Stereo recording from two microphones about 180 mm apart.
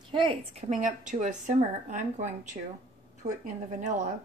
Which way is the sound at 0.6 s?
40° right (ahead or behind).